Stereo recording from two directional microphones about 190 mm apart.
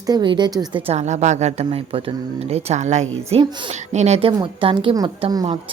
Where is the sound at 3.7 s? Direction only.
35° right (ahead or behind).